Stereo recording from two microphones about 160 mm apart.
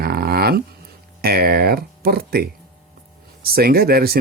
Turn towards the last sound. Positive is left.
turn(degrees=-70)  # may be behind; listen again after turning